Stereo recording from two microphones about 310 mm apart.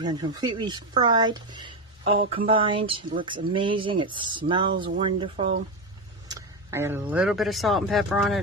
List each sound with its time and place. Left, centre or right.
0.0 s speech: centre